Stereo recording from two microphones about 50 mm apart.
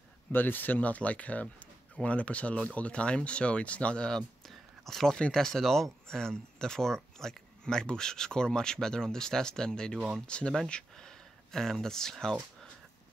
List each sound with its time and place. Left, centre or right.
0.3 s speech: left; by 4.2 s centre
4.5 s a sound: centre
5.1 s speech: centre